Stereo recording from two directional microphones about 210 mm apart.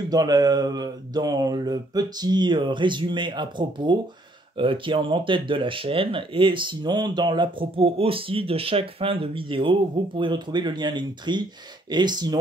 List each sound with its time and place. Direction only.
0.1 s speech: 20° right (ahead or behind)